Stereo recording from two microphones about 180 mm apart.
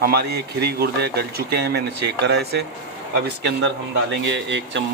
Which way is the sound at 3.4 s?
75° right (ahead or behind).